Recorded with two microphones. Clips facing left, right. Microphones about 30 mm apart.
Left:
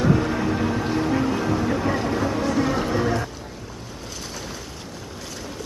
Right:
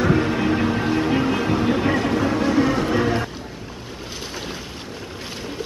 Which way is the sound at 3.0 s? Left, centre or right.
Right.